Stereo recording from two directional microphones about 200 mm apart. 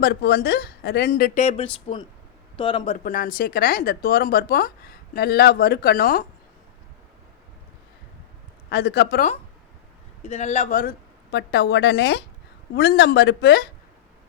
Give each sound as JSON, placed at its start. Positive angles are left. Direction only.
{"t": 0.0, "sound": "a man's voice", "side_deg": 50}
{"t": 3.0, "sound": "speech", "side_deg": 45}
{"t": 8.7, "sound": "speech", "side_deg": 55}
{"t": 10.2, "sound": "a woman's voice", "side_deg": 30}